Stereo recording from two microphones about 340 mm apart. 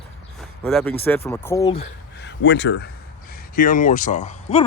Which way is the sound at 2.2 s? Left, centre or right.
Left.